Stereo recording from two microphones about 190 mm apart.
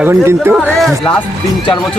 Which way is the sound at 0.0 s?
10° right (ahead or behind).